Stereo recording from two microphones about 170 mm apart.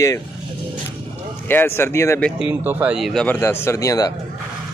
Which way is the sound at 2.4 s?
10° right (ahead or behind).